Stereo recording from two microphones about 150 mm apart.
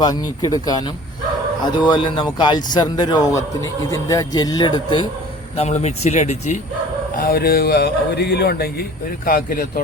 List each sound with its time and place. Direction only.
0.0 s speech: 25° left (ahead or behind)
5.5 s speech: 50° left (ahead or behind)
7.2 s a man's voice: 85° left